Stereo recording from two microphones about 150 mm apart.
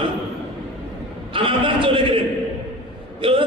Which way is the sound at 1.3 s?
35° right (ahead or behind).